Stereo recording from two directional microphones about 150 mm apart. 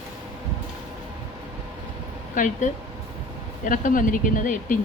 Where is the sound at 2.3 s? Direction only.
60° left (ahead or behind).